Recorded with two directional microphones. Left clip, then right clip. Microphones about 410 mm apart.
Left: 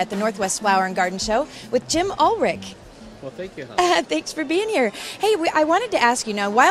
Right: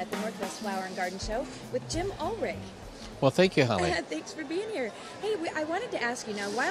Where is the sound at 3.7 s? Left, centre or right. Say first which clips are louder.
Left 11 dB; left.